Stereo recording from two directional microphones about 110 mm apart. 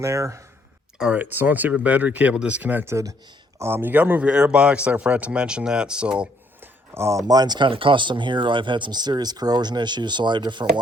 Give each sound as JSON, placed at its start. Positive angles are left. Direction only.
{"t": 0.0, "sound": "speech", "side_deg": -25}
{"t": 0.9, "sound": "speech", "side_deg": -10}
{"t": 6.9, "sound": "speech", "side_deg": -25}
{"t": 7.3, "sound": "speech", "side_deg": -40}